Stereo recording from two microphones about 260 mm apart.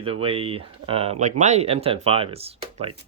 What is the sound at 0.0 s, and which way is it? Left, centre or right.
Speech, right.